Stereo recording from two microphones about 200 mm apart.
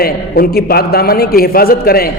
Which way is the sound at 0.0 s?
50° left (ahead or behind).